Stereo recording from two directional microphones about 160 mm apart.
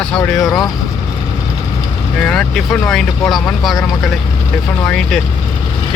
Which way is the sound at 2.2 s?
5° left (ahead or behind).